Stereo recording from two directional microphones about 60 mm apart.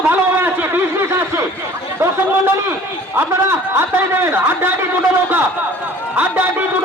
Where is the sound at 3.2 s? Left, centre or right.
Right.